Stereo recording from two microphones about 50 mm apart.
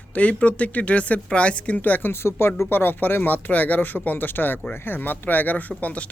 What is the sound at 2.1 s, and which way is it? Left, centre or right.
Speech, left.